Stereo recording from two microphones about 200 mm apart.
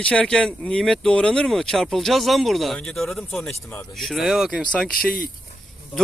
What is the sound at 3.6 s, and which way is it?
Speech, 15° left (ahead or behind).